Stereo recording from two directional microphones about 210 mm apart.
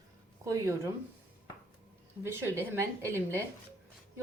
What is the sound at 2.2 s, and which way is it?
Speech, 10° right (ahead or behind).